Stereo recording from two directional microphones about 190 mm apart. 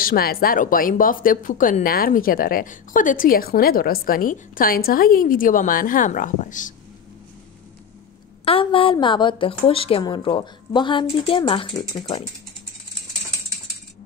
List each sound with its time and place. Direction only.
0.0 s speech: 50° left (ahead or behind)
8.5 s a woman's voice: 25° left (ahead or behind)